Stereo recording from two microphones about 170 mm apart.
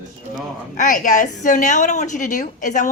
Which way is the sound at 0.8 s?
50° left (ahead or behind).